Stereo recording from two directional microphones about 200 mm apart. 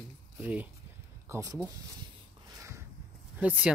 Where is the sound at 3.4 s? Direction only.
5° right (ahead or behind).